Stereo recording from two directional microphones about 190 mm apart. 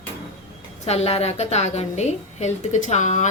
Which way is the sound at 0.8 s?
35° left (ahead or behind).